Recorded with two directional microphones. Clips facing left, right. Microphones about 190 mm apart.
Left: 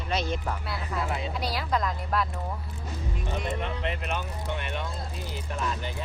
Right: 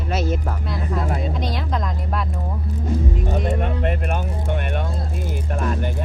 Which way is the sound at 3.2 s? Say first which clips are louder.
Right 8 dB; 40° right (ahead or behind).